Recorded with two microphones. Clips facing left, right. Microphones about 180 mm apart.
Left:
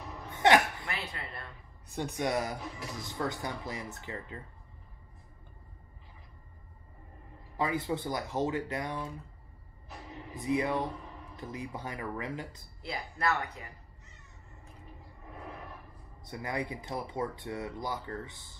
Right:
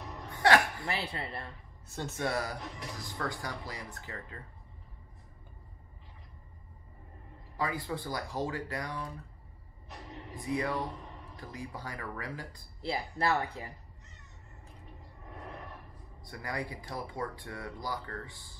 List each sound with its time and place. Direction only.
0.0 s a sound: 5° left (ahead or behind)
0.3 s a sound: 20° left (ahead or behind)
0.8 s speech: 30° right (ahead or behind)
1.9 s speech: 15° left (ahead or behind)
2.6 s speech: 5° left (ahead or behind)
3.0 s speech: 20° left (ahead or behind)
7.5 s speech: 20° left (ahead or behind)
9.8 s music: 5° left (ahead or behind)
10.4 s speech: 20° left (ahead or behind)
12.8 s speech: 30° right (ahead or behind)
16.2 s speech: 20° left (ahead or behind)